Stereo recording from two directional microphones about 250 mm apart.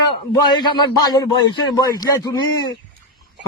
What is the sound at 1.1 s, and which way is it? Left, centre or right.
Speech, centre.